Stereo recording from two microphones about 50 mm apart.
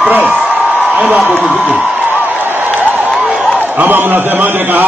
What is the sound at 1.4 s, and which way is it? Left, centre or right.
Speech, right.